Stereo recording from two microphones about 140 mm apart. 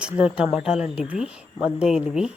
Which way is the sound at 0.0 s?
5° right (ahead or behind).